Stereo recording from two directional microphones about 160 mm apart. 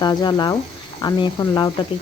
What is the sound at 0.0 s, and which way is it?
Speech, 25° left (ahead or behind).